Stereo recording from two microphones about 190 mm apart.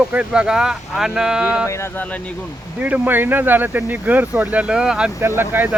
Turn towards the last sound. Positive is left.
turn(degrees=-10)  # may be behind; listen again after turning